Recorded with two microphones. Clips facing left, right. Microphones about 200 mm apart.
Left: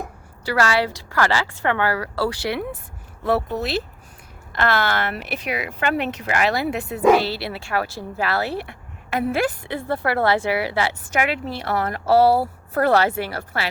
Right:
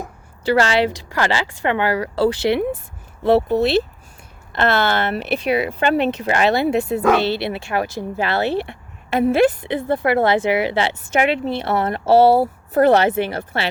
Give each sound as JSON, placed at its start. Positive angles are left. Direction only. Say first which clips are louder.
{"t": 0.4, "sound": "speech", "louder": "right 4 dB", "side_deg": -25}